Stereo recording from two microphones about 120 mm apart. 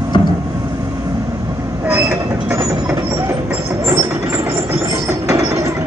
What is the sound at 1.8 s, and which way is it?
Train, 15° right (ahead or behind).